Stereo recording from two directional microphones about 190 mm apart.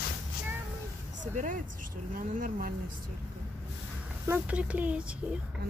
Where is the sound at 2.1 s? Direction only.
45° right (ahead or behind).